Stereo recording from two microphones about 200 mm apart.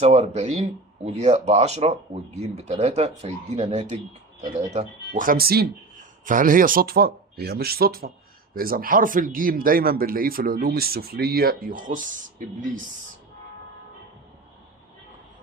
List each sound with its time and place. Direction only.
0.0 s speech: 35° right (ahead or behind)